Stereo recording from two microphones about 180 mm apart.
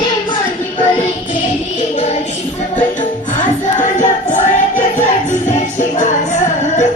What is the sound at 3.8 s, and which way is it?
Music, 45° left (ahead or behind).